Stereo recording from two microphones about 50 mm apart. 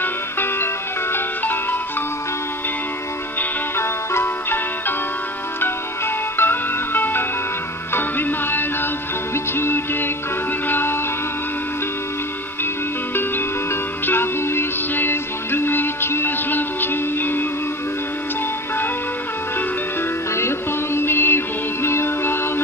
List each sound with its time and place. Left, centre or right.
0.0 s music: left
3.7 s music: left
6.3 s music: left
14.0 s music: left
20.3 s music: left